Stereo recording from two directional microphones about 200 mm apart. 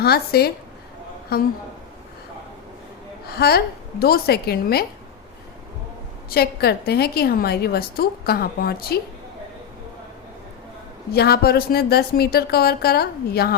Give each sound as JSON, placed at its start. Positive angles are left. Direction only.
{"t": 0.0, "sound": "a woman's voice", "side_deg": 50}
{"t": 3.2, "sound": "a woman's voice", "side_deg": 50}
{"t": 6.3, "sound": "a woman's voice", "side_deg": 50}
{"t": 11.1, "sound": "a woman's voice", "side_deg": 50}